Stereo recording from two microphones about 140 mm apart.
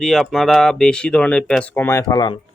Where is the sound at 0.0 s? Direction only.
Centre (ahead or behind).